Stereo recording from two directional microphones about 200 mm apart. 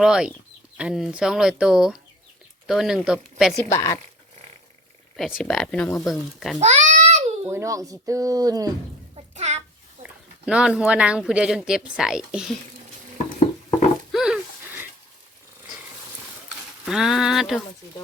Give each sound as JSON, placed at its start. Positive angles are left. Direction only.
{"t": 0.0, "sound": "speech", "side_deg": -5}
{"t": 3.7, "sound": "speech", "side_deg": 15}
{"t": 5.1, "sound": "speech", "side_deg": 0}
{"t": 6.6, "sound": "babbling", "side_deg": -35}
{"t": 7.5, "sound": "speech", "side_deg": -15}
{"t": 9.3, "sound": "a sound", "side_deg": -35}
{"t": 10.0, "sound": "speech", "side_deg": -5}
{"t": 14.1, "sound": "a sound", "side_deg": -5}
{"t": 16.8, "sound": "speech", "side_deg": 0}